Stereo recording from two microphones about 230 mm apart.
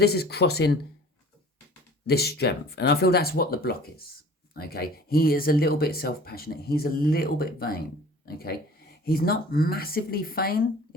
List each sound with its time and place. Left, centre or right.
0.0 s speech: left
2.0 s speech: left